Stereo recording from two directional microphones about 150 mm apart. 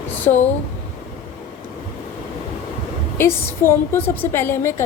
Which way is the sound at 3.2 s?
15° left (ahead or behind).